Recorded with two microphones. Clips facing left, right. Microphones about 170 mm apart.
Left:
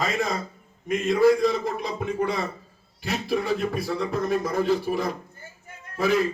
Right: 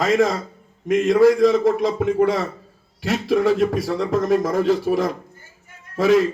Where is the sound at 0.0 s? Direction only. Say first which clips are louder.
Right 8 dB; 90° right.